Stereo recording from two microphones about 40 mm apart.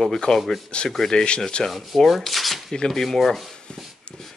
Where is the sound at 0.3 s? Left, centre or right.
Centre.